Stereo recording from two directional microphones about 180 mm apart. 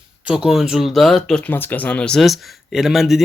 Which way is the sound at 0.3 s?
5° right (ahead or behind).